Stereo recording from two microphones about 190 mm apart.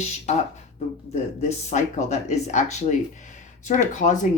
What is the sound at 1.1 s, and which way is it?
Speech, 35° left (ahead or behind).